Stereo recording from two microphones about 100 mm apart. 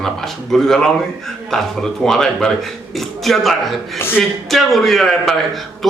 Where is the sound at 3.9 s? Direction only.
20° left (ahead or behind).